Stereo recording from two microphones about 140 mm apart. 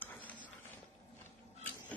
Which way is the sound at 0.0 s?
15° left (ahead or behind).